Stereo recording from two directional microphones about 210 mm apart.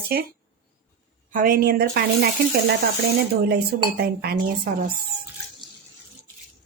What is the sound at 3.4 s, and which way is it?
Speech, 50° right (ahead or behind).